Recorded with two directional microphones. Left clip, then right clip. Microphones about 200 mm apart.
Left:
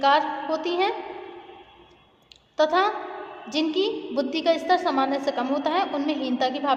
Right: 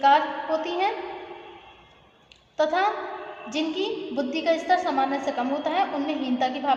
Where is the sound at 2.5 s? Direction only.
50° left (ahead or behind).